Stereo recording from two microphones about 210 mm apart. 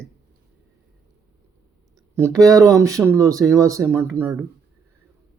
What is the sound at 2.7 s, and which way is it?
Speech, 15° right (ahead or behind).